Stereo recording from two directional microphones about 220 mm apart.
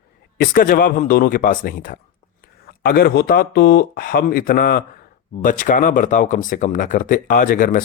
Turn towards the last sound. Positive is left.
turn(degrees=40)  # may be behind; listen again after turning